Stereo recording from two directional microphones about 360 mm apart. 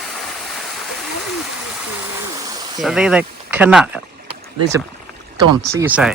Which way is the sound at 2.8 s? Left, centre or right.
Centre.